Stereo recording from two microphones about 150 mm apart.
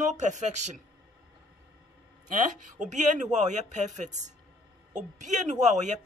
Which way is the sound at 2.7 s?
55° right (ahead or behind).